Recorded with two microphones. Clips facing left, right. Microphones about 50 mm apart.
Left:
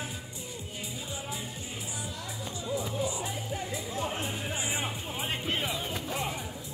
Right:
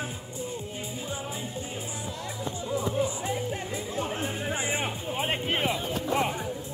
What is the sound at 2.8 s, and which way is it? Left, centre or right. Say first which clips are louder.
Music: right 6 dB; right.